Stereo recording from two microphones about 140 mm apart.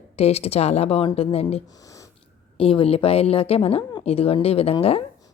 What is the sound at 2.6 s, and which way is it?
A woman's voice, 40° left (ahead or behind).